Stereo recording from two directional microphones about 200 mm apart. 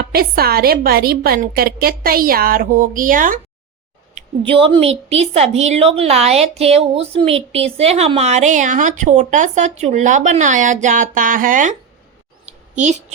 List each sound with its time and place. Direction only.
0.0 s a woman's voice: 50° right (ahead or behind)
4.1 s a woman's voice: 25° right (ahead or behind)
12.5 s a sound: 35° right (ahead or behind)